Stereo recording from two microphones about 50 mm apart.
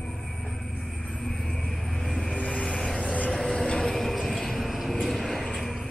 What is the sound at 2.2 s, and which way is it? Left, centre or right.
Vehicle, centre.